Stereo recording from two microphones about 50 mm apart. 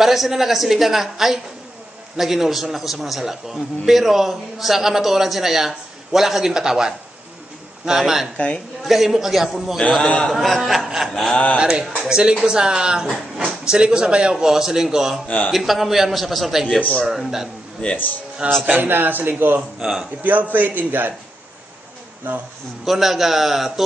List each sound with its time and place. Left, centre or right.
0.0 s a man's voice: centre
10.0 s a man's voice: left
10.3 s a man's voice: centre
11.9 s speech: centre
15.2 s a man's voice: left
15.5 s a man's voice: centre
17.8 s a man's voice: centre
18.6 s a man's voice: right
19.8 s a man's voice: centre
20.2 s a man's voice: right
22.3 s a man's voice: right
22.8 s a man's voice: centre